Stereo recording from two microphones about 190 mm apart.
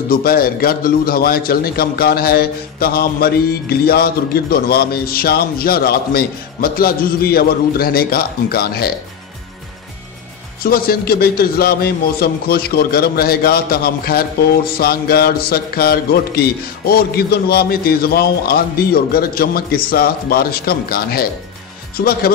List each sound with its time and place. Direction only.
0.1 s a man's voice: 50° left (ahead or behind)
10.6 s a man's voice: 55° left (ahead or behind)